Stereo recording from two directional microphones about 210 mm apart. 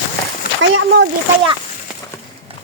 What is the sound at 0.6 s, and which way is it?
Speech, 65° right (ahead or behind).